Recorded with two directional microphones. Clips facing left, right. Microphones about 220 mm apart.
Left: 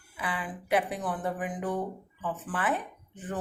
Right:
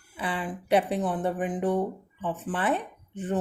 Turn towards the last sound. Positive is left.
turn(degrees=-25)  # may be behind; listen again after turning